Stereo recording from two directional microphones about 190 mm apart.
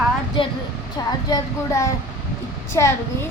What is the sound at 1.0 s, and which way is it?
A child's voice, 20° left (ahead or behind).